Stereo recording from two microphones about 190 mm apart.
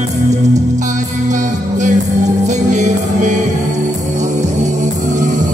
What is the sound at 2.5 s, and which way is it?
Music, 40° right (ahead or behind).